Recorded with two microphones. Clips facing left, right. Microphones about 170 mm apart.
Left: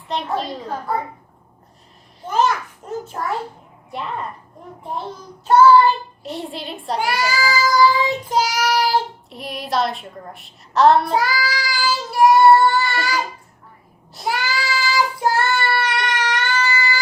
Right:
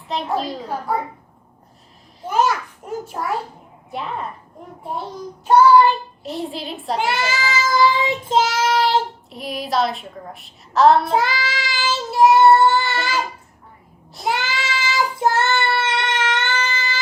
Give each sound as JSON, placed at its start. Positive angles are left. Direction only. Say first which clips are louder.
{"t": 0.1, "sound": "a woman's voice", "louder": "right 1 dB", "side_deg": 0}
{"t": 2.2, "sound": "a child's voice", "louder": "even", "side_deg": -10}
{"t": 5.5, "sound": "child singing", "louder": "even", "side_deg": -15}
{"t": 6.2, "sound": "a woman's voice", "louder": "right 2 dB", "side_deg": 0}
{"t": 6.9, "sound": "child singing", "louder": "left 1 dB", "side_deg": -25}
{"t": 9.3, "sound": "a woman's voice", "louder": "right 1 dB", "side_deg": 0}
{"t": 11.1, "sound": "child singing", "louder": "even", "side_deg": -25}
{"t": 14.3, "sound": "child singing", "louder": "even", "side_deg": -20}